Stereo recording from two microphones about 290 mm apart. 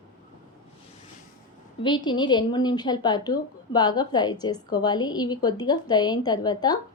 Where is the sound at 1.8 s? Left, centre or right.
Centre.